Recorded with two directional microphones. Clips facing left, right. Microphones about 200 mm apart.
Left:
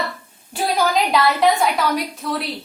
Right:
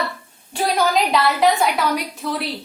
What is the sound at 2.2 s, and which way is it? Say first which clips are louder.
Speech: right 2 dB; centre (ahead or behind).